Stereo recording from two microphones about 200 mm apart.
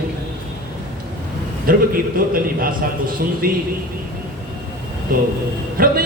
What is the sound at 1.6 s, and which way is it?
Speech, 45° right (ahead or behind).